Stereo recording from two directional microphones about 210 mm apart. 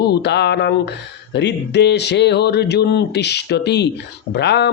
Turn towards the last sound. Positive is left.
turn(degrees=50)  # may be behind; listen again after turning